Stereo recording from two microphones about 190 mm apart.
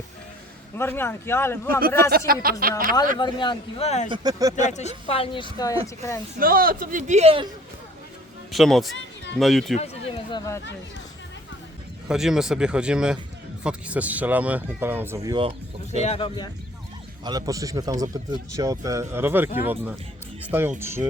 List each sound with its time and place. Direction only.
0.8 s speech: 10° left (ahead or behind)
2.0 s a man's voice: 55° right (ahead or behind)
3.2 s speech: 25° left (ahead or behind)
4.1 s speech: 20° right (ahead or behind)
4.6 s speech: 35° left (ahead or behind)
6.4 s a man's voice: 50° right (ahead or behind); by 7.4 s 30° right (ahead or behind)
8.5 s speech: centre (ahead or behind)
9.7 s run: 35° left (ahead or behind)
12.0 s speech: 5° right (ahead or behind); by 15.4 s 20° right (ahead or behind)
16.0 s speech: 30° left (ahead or behind)
17.2 s speech: 20° right (ahead or behind)